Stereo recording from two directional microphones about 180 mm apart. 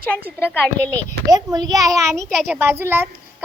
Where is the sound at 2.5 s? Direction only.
15° right (ahead or behind).